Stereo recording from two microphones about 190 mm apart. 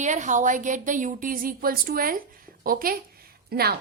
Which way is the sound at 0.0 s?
40° right (ahead or behind).